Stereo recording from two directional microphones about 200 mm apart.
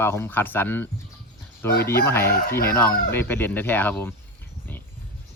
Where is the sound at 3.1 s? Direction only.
10° left (ahead or behind).